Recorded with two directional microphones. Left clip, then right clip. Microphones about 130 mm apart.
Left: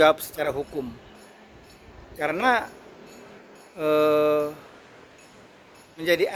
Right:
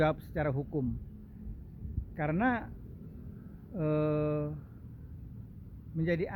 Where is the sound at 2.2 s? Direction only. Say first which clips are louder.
Left 10 dB; 15° left (ahead or behind).